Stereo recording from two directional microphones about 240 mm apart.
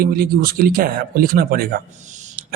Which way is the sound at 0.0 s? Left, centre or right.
Right.